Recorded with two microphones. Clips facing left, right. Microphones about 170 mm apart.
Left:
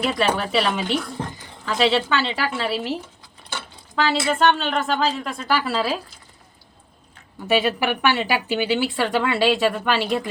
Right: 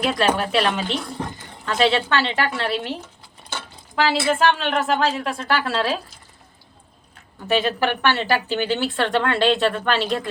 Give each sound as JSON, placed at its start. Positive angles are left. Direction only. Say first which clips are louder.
{"t": 0.1, "sound": "a woman's voice", "louder": "right 1 dB", "side_deg": 0}
{"t": 7.4, "sound": "a woman's voice", "louder": "even", "side_deg": 10}